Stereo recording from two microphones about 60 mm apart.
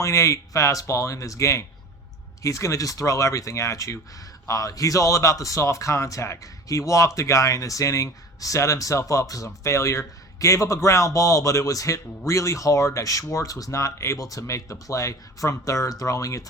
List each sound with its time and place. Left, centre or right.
0.0 s speech: left